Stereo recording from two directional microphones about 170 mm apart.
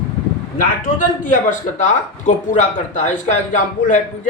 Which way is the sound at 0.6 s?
50° left (ahead or behind).